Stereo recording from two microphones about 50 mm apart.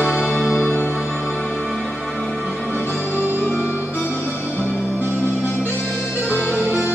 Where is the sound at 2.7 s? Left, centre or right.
Left.